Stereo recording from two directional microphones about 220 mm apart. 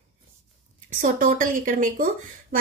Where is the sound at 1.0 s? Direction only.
40° right (ahead or behind).